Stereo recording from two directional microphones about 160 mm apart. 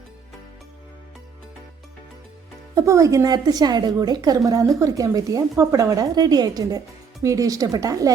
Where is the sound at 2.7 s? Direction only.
20° right (ahead or behind).